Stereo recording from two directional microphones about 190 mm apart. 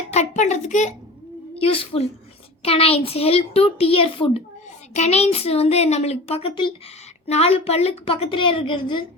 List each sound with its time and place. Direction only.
0.1 s a woman's voice: 35° left (ahead or behind)